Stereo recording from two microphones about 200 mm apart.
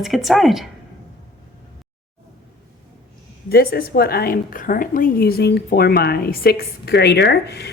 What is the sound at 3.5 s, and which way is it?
A woman's voice, 50° left (ahead or behind).